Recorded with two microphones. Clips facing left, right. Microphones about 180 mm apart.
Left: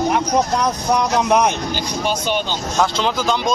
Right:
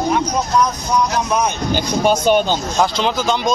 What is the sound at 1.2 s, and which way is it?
Speech, 70° left (ahead or behind).